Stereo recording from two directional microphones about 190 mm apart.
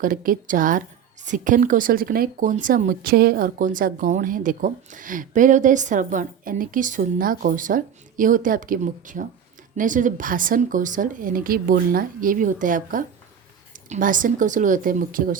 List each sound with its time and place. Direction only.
0.0 s a woman's voice: 45° right (ahead or behind)